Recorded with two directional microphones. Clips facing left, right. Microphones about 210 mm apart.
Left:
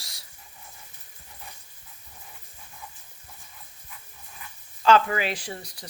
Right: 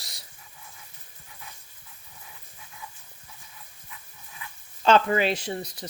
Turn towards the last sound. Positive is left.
turn(degrees=-20)  # may be behind; listen again after turning